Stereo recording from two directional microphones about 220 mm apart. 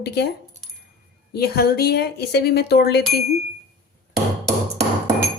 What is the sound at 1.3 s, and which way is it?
Speech, 45° left (ahead or behind).